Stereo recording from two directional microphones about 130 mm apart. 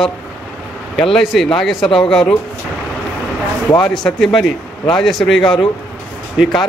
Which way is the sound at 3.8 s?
5° left (ahead or behind).